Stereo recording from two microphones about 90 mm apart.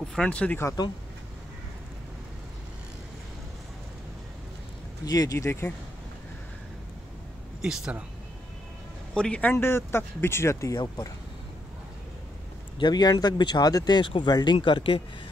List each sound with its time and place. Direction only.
0.1 s speech: 10° left (ahead or behind)
5.0 s speech: 45° left (ahead or behind)
7.6 s speech: 10° right (ahead or behind)
9.1 s speech: 10° left (ahead or behind)
9.6 s speech: 25° left (ahead or behind)
12.7 s a man's voice: 55° left (ahead or behind)